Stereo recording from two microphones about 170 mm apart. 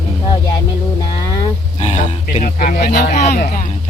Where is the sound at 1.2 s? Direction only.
25° left (ahead or behind).